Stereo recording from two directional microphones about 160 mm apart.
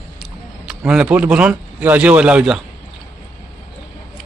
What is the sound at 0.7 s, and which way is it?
A man's voice, 5° right (ahead or behind).